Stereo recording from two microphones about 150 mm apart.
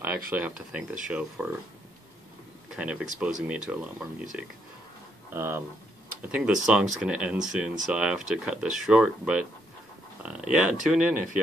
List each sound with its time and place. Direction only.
0.3 s speech: 10° right (ahead or behind)
2.7 s speech: 5° right (ahead or behind)